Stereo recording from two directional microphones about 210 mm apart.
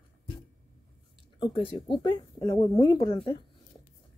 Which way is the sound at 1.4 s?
25° left (ahead or behind).